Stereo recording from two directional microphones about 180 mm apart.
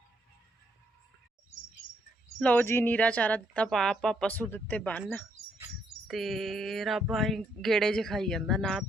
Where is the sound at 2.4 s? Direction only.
10° left (ahead or behind).